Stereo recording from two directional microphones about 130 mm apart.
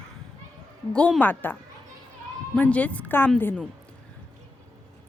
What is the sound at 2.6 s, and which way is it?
A woman's voice, 10° left (ahead or behind).